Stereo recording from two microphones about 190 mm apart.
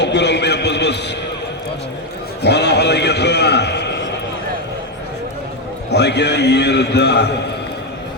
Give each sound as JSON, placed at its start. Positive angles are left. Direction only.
{"t": 0.0, "sound": "a sound", "side_deg": 65}
{"t": 2.4, "sound": "a man's voice", "side_deg": 60}
{"t": 5.9, "sound": "a man's voice", "side_deg": 65}